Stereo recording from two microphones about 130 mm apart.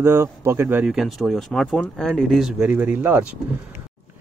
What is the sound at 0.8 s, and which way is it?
Speech, centre (ahead or behind).